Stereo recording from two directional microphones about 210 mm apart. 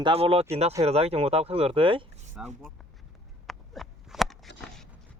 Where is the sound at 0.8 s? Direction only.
30° right (ahead or behind).